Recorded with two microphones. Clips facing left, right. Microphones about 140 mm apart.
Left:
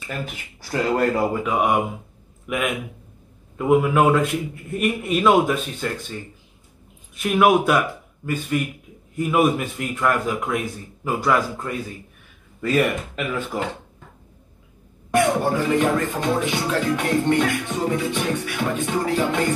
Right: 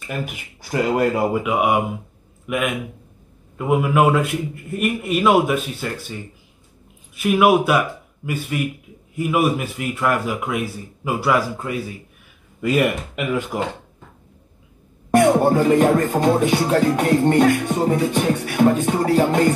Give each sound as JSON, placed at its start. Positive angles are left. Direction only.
{"t": 0.2, "sound": "a man's voice", "side_deg": -15}
{"t": 7.2, "sound": "a man's voice", "side_deg": -5}
{"t": 15.0, "sound": "speech", "side_deg": -45}